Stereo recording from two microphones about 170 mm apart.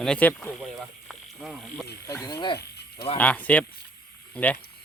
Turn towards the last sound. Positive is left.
turn(degrees=10)  # may be behind; listen again after turning